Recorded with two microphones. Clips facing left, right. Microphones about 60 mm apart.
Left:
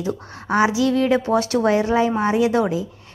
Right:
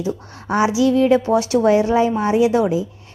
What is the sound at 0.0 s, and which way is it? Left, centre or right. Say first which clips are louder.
Speech: right 1 dB; left.